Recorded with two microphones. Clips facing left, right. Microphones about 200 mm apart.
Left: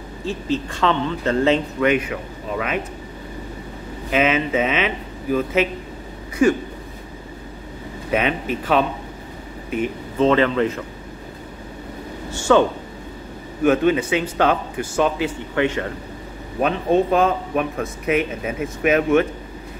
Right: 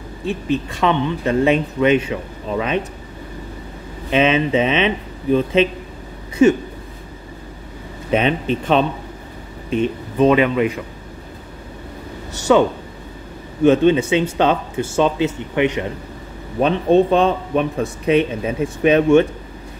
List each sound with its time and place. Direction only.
0.2 s speech: 15° right (ahead or behind)
4.1 s speech: 25° right (ahead or behind)
8.1 s speech: 25° right (ahead or behind)
9.7 s a sound: 25° right (ahead or behind)
10.2 s speech: 15° right (ahead or behind)
12.3 s speech: 20° right (ahead or behind)
16.6 s speech: 30° right (ahead or behind)